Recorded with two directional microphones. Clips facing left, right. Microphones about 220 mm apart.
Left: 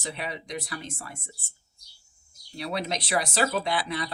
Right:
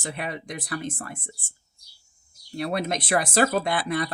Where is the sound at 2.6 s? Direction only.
50° right (ahead or behind).